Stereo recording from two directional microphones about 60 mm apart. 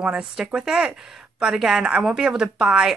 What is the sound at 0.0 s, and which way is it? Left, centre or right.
A woman's voice, centre.